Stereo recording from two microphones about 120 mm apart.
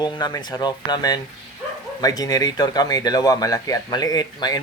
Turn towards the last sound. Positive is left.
turn(degrees=35)  # may be behind; listen again after turning